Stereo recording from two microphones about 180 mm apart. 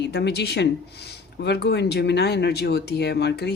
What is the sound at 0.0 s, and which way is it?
Speech, 70° left (ahead or behind).